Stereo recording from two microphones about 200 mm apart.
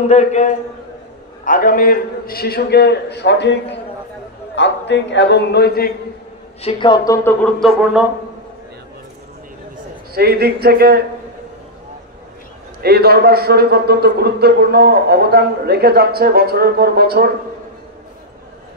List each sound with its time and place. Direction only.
0.0 s a man's voice: 35° left (ahead or behind); by 3.5 s 60° left (ahead or behind)
4.6 s a man's voice: 60° left (ahead or behind)
6.6 s a woman's voice: 25° left (ahead or behind)
7.2 s speech: 5° left (ahead or behind)
10.1 s a man's voice: 50° right (ahead or behind)
12.8 s a man's voice: 50° right (ahead or behind)